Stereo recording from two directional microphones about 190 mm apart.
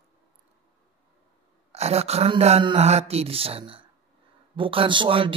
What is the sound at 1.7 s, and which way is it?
A man's voice, 35° right (ahead or behind).